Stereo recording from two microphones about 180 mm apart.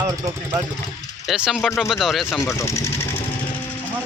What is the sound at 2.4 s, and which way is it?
Speech, 15° left (ahead or behind).